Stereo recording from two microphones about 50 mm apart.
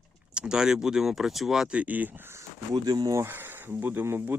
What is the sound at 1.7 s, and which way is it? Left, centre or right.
Speech, right.